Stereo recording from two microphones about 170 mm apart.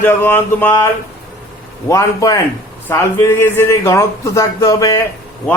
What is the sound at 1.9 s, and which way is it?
A man's voice, 20° left (ahead or behind).